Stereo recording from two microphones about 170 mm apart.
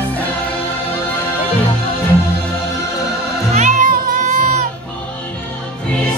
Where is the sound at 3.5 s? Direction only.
45° right (ahead or behind).